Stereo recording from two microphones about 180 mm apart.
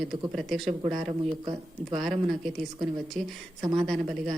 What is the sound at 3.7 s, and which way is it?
Speech, centre (ahead or behind).